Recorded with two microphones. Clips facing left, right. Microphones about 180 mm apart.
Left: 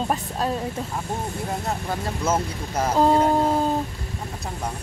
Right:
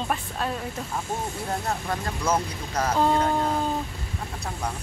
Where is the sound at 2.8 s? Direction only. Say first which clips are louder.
Left 4 dB; 30° left (ahead or behind).